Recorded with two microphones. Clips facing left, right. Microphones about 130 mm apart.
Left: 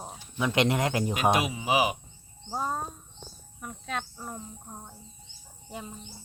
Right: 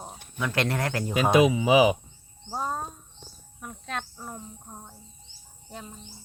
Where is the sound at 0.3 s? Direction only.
20° left (ahead or behind).